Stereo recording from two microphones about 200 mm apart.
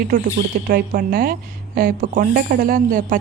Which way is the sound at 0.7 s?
45° right (ahead or behind).